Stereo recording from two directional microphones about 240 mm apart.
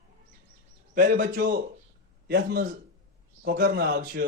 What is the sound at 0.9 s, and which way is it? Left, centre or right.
A man's voice, right.